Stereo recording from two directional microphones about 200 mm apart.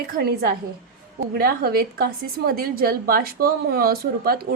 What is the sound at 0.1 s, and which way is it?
A woman's voice, 50° right (ahead or behind).